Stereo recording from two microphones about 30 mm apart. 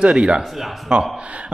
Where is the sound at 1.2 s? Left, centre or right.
Right.